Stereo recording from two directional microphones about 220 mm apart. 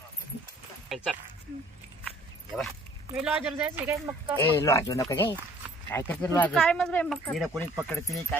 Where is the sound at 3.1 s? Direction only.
5° right (ahead or behind).